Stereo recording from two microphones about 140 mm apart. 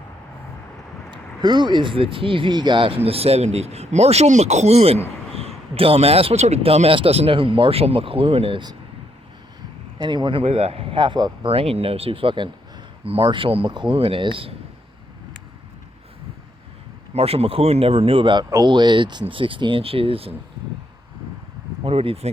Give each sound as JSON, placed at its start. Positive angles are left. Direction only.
{"t": 1.1, "sound": "speech", "side_deg": -30}
{"t": 10.0, "sound": "speech", "side_deg": -35}
{"t": 10.4, "sound": "speech", "side_deg": -45}
{"t": 17.2, "sound": "speech", "side_deg": -45}
{"t": 21.8, "sound": "speech", "side_deg": -45}